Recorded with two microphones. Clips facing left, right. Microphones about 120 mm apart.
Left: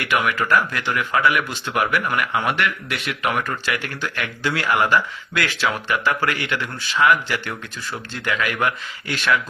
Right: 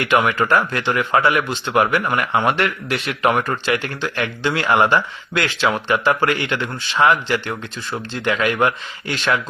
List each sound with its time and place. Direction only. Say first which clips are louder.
0.0 s speech: right 4 dB; 30° right (ahead or behind)